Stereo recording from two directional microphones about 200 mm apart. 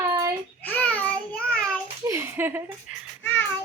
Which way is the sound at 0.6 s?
5° left (ahead or behind).